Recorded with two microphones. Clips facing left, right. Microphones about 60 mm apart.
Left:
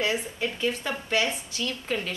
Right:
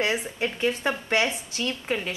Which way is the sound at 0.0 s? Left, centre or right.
Right.